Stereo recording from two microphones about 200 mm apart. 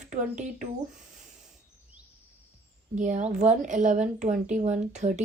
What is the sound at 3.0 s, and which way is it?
Speech, 40° right (ahead or behind).